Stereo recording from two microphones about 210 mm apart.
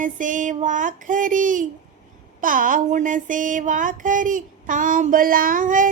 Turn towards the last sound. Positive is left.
turn(degrees=-40)  # may be behind; listen again after turning